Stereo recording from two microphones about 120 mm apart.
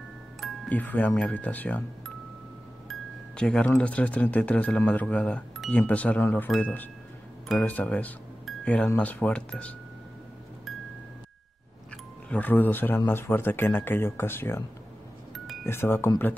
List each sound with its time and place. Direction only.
0.7 s speech: 15° left (ahead or behind)
2.9 s speech: 5° left (ahead or behind)
12.3 s speech: 15° left (ahead or behind)
15.6 s speech: 20° left (ahead or behind)